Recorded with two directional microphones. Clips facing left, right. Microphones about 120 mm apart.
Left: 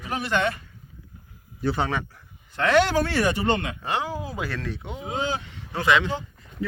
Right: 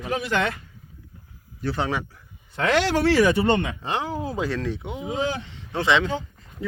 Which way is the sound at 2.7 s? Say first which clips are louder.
Right 2 dB; 85° right.